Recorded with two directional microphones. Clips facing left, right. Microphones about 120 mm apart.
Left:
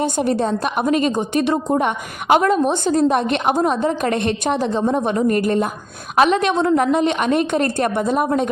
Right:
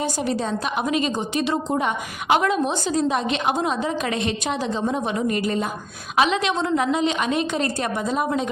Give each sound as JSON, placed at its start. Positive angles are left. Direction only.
{"t": 0.0, "sound": "a woman's voice", "side_deg": 50}